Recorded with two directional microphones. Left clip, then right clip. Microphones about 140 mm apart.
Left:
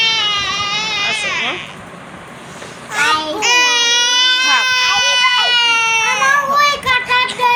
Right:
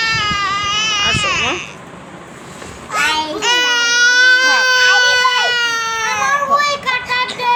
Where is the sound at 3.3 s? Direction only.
90° right.